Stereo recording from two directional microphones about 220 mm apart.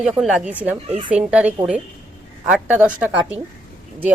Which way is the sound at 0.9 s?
25° right (ahead or behind).